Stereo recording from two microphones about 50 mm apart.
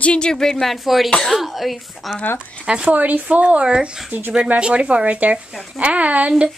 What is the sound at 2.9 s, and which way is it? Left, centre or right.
Speech, right.